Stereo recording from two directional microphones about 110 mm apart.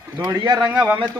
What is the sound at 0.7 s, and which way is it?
Speech, 15° right (ahead or behind).